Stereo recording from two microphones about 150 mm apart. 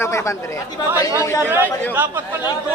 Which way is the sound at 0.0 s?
20° left (ahead or behind).